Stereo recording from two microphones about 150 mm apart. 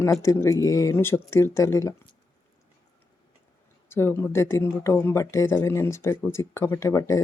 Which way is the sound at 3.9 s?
15° left (ahead or behind).